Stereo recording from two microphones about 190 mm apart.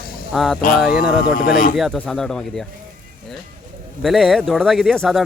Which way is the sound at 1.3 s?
45° left (ahead or behind).